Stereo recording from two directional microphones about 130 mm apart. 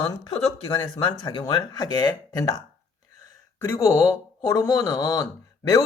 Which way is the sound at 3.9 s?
20° left (ahead or behind).